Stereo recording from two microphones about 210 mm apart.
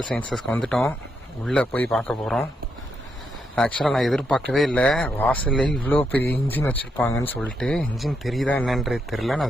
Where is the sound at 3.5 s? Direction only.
5° left (ahead or behind).